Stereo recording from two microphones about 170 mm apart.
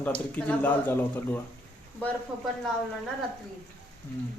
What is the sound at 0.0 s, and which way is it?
Speech, 5° left (ahead or behind).